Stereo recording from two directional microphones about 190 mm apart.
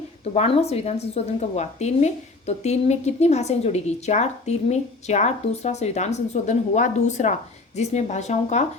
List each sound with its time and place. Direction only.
0.3 s a woman's voice: 30° left (ahead or behind)